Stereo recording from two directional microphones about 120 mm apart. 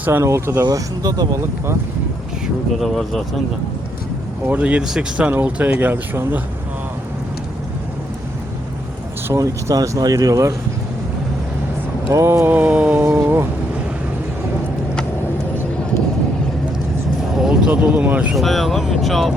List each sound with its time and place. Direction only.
0.0 s speech: 20° right (ahead or behind)
2.7 s speech: centre (ahead or behind)
4.4 s speech: 10° right (ahead or behind)
9.3 s speech: 25° right (ahead or behind)
12.1 s speech: 25° right (ahead or behind)
17.3 s speech: 5° right (ahead or behind)
18.3 s speech: centre (ahead or behind)